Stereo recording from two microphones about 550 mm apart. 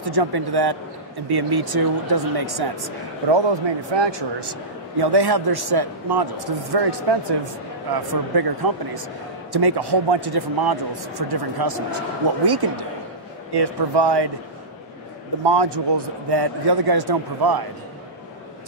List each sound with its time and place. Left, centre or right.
0.0 s a man's voice: right
15.4 s a man's voice: right